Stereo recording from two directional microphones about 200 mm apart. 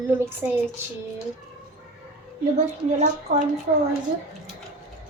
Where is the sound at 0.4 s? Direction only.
10° right (ahead or behind).